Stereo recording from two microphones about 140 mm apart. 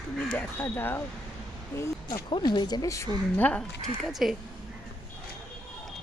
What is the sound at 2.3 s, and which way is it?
A woman's voice, 30° left (ahead or behind).